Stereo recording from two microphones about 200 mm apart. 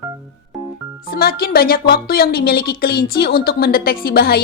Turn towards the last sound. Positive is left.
turn(degrees=50)  # may be behind; listen again after turning